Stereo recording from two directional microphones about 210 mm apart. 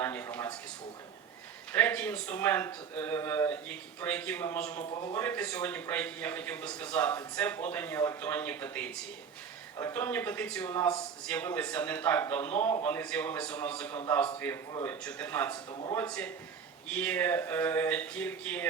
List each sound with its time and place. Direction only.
0.0 s speech: 10° left (ahead or behind)
1.7 s a man's voice: 10° left (ahead or behind)
4.8 s a man's voice: 20° left (ahead or behind)
5.1 s a man's voice: 10° left (ahead or behind)
14.7 s a man's voice: 20° left (ahead or behind)
15.0 s a man's voice: 10° left (ahead or behind)
15.7 s a man's voice: 20° left (ahead or behind)
16.0 s a man's voice: 5° left (ahead or behind)